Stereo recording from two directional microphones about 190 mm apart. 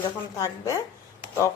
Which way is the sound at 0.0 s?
15° left (ahead or behind).